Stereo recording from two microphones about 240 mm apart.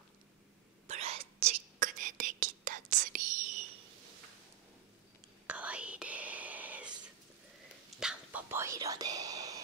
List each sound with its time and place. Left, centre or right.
0.8 s whispering: right
5.5 s whispering: centre
8.0 s whispering: centre